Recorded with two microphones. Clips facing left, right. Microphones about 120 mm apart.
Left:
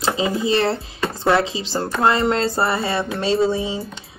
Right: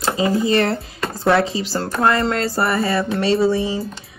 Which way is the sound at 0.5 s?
30° left (ahead or behind).